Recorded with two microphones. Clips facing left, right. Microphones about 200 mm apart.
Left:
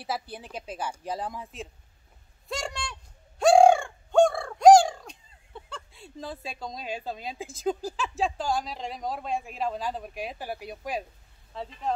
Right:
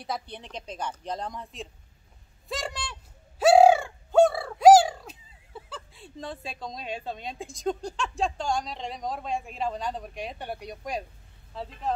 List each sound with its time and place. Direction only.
0.0 s a woman's voice: 5° left (ahead or behind)
2.4 s fowl: centre (ahead or behind)
11.5 s a woman's voice: centre (ahead or behind)